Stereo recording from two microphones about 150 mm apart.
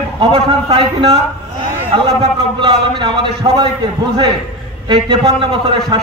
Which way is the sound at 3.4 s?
35° right (ahead or behind).